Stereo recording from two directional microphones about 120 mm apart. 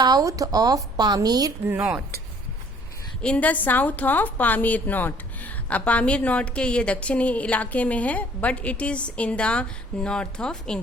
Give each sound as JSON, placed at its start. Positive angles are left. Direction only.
{"t": 0.0, "sound": "a woman's voice", "side_deg": -30}
{"t": 1.6, "sound": "speech", "side_deg": -15}
{"t": 3.2, "sound": "a woman's voice", "side_deg": 10}